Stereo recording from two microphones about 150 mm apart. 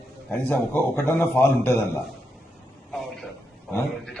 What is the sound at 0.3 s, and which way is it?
A man's voice, 15° left (ahead or behind).